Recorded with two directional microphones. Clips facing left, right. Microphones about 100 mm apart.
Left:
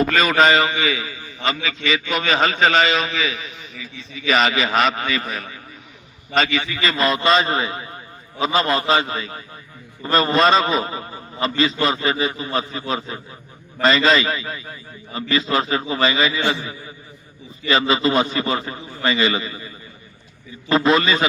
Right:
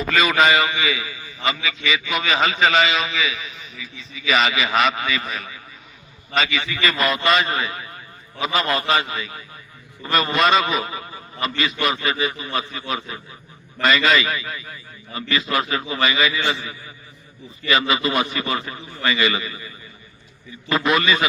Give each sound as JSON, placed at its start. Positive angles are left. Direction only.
{"t": 0.3, "sound": "a man's voice", "side_deg": 30}
{"t": 0.7, "sound": "a man's voice", "side_deg": 20}
{"t": 6.6, "sound": "a man's voice", "side_deg": 20}